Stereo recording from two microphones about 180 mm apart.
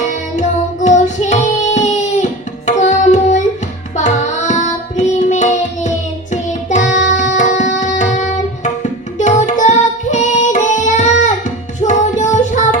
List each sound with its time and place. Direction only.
0.3 s child singing: 40° left (ahead or behind)
2.6 s music: 40° left (ahead or behind)
9.1 s carnatic music: 40° left (ahead or behind)
11.8 s music: 40° left (ahead or behind)